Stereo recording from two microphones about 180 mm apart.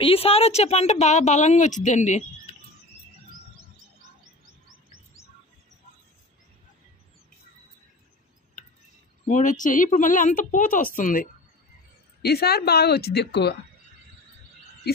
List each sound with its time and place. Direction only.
0.0 s speech: 30° left (ahead or behind)
9.3 s speech: 45° left (ahead or behind)
12.2 s speech: 60° left (ahead or behind)